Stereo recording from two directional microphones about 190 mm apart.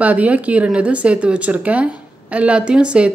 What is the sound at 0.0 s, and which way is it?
A woman's voice, 10° right (ahead or behind).